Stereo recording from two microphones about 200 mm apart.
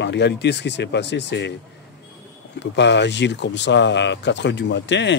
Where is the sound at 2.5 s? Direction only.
60° left (ahead or behind).